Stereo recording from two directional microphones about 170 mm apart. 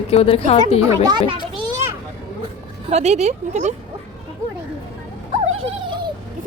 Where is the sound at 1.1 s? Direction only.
25° right (ahead or behind).